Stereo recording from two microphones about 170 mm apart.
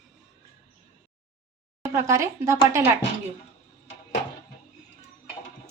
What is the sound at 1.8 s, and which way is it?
A woman's voice, 15° right (ahead or behind).